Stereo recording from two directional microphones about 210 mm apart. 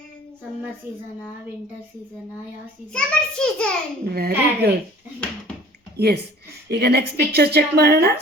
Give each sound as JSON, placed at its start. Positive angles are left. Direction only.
{"t": 2.9, "sound": "a child's voice", "side_deg": 5}
{"t": 4.1, "sound": "a woman's voice", "side_deg": -50}
{"t": 6.0, "sound": "a woman's voice", "side_deg": -50}